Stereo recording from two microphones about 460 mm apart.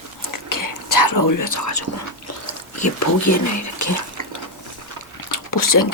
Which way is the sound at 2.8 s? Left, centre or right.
Left.